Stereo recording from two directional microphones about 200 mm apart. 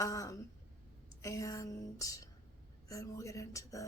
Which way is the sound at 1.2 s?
15° left (ahead or behind).